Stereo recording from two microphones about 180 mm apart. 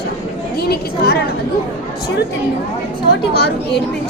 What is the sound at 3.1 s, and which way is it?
Speech, 70° left (ahead or behind).